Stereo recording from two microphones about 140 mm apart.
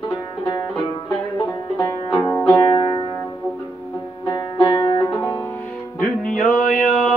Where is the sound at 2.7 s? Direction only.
25° left (ahead or behind).